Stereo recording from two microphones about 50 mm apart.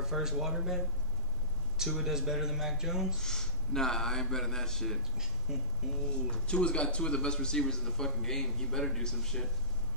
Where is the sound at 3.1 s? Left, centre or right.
Centre.